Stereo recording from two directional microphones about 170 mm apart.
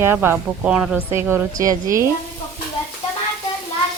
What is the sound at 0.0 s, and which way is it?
A woman's voice, 15° right (ahead or behind).